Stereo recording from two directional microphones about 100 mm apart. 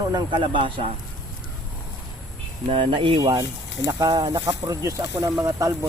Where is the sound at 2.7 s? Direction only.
60° right (ahead or behind).